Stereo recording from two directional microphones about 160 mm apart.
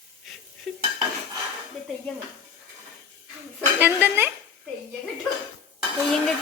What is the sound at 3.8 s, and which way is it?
Speech, 15° right (ahead or behind).